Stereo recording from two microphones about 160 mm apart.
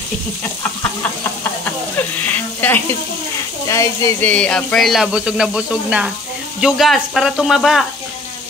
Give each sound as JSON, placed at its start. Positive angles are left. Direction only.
{"t": 1.6, "sound": "a sound", "side_deg": 10}
{"t": 3.6, "sound": "speech", "side_deg": 20}
{"t": 4.3, "sound": "speech", "side_deg": 5}